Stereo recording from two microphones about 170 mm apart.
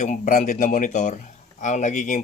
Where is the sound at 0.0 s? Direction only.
45° left (ahead or behind).